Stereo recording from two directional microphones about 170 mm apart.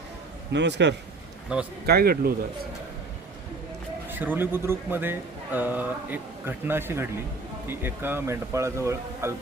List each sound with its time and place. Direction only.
0.5 s a man's voice: 90° right
1.5 s speech: 5° right (ahead or behind)
1.9 s speech: 60° right (ahead or behind)
4.1 s speech: 10° right (ahead or behind)